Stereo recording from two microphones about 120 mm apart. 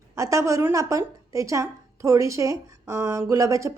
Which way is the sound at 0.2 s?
25° right (ahead or behind).